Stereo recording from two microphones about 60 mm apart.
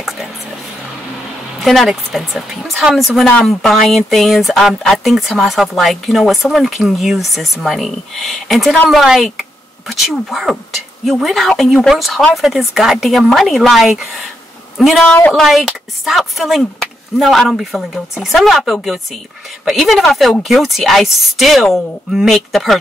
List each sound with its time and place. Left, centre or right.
1.6 s speech: centre